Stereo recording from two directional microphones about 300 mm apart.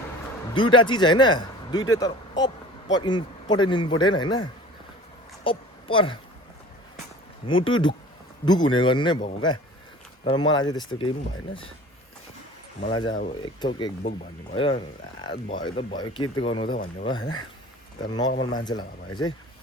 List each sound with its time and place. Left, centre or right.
0.5 s a woman's voice: centre
7.4 s speech: centre
12.8 s speech: centre
18.3 s speech: left
18.5 s speech: centre